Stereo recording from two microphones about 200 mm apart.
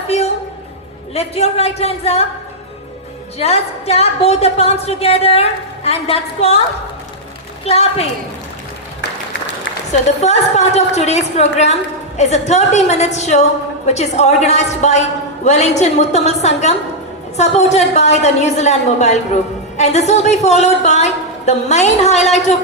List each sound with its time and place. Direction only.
0.1 s a sound: 30° left (ahead or behind)
1.1 s a woman's voice: 30° left (ahead or behind)
3.3 s a woman's voice: 30° left (ahead or behind)
7.6 s a woman's voice: 30° left (ahead or behind)
10.2 s a woman's voice: 35° left (ahead or behind)